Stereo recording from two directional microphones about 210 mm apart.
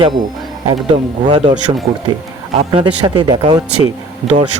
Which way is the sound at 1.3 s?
20° right (ahead or behind).